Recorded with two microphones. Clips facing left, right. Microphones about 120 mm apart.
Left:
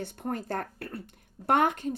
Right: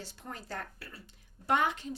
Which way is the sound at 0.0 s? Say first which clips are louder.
Left 11 dB; 55° left (ahead or behind).